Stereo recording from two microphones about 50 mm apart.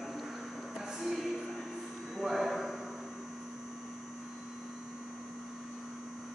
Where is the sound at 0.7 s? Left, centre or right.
Centre.